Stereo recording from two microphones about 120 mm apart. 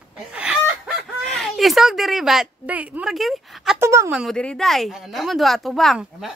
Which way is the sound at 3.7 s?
20° right (ahead or behind).